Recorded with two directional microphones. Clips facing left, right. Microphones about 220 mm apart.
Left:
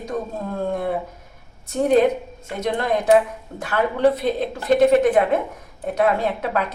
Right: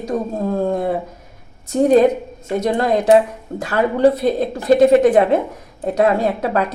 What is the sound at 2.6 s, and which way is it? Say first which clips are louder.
Speech: right 4 dB; 35° right (ahead or behind).